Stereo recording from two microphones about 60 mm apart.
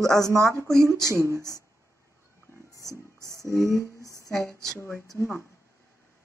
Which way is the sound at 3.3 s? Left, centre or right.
Left.